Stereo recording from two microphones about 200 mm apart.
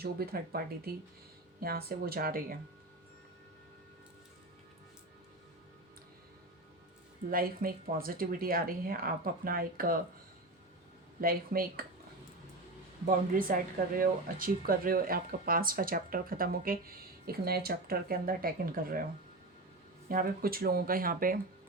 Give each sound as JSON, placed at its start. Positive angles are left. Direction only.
{"t": 0.0, "sound": "speech", "side_deg": -50}
{"t": 7.3, "sound": "speech", "side_deg": -45}
{"t": 11.2, "sound": "speech", "side_deg": -45}
{"t": 13.1, "sound": "speech", "side_deg": -45}
{"t": 20.1, "sound": "speech", "side_deg": -45}